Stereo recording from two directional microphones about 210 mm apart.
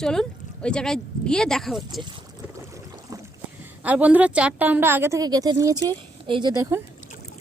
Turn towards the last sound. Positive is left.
turn(degrees=-15)  # may be behind; listen again after turning